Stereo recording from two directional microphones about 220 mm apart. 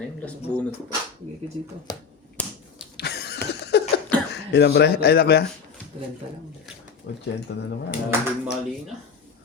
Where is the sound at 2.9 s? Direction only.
50° left (ahead or behind).